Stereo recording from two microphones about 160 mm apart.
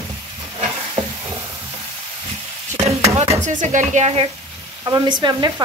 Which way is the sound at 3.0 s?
45° right (ahead or behind).